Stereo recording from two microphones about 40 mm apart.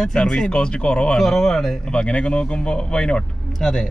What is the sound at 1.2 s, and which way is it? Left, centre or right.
Speech, centre.